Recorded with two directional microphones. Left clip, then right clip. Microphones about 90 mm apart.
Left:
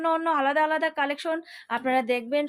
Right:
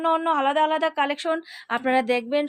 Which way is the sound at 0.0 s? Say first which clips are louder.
Right 2 dB; 20° right (ahead or behind).